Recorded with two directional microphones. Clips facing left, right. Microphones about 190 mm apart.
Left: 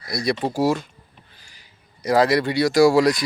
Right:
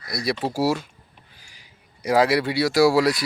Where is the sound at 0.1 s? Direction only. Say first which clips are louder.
Left 2 dB; centre (ahead or behind).